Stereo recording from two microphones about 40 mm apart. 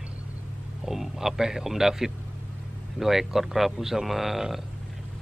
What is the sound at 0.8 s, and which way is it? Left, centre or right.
A man's voice, centre.